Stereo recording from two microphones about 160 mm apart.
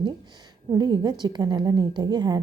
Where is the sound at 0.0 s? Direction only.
25° right (ahead or behind).